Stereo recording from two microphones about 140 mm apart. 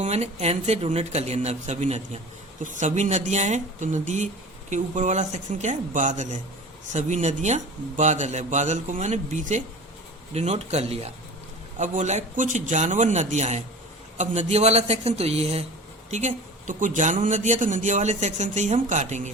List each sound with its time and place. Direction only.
0.0 s a man's voice: 55° right (ahead or behind)
10.3 s speech: 50° right (ahead or behind)
11.8 s a man's voice: 60° right (ahead or behind)